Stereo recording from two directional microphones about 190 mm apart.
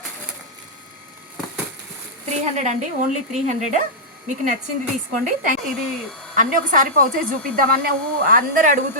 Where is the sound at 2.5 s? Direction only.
40° right (ahead or behind).